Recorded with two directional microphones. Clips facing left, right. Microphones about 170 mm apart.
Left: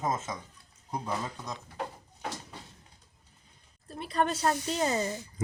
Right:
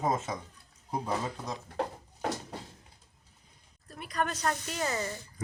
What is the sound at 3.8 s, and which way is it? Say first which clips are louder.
Speech: left 4 dB; 30° left (ahead or behind).